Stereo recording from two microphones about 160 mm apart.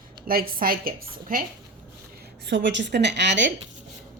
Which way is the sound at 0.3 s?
65° right (ahead or behind).